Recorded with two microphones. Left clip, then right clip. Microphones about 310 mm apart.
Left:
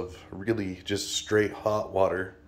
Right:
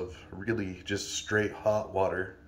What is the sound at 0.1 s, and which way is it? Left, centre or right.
Speech, centre.